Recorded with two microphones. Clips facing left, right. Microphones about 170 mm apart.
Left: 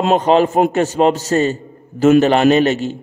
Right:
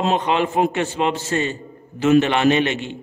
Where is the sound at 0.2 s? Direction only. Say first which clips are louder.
Left 6 dB; 40° left (ahead or behind).